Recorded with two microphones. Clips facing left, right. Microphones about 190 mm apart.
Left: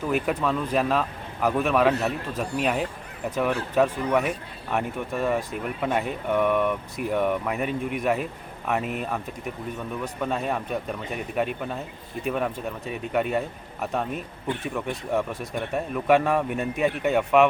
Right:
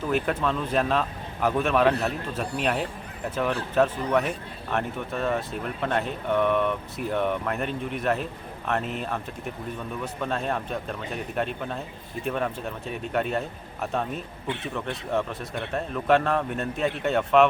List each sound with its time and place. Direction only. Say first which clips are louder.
0.1 s speech: left 1 dB; 5° left (ahead or behind)
14.4 s speech: left 3 dB; 45° left (ahead or behind)
14.7 s speech: left 1 dB; 10° left (ahead or behind)